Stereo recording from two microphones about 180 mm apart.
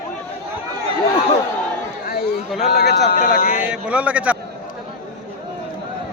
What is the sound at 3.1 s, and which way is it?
Speech, 50° left (ahead or behind).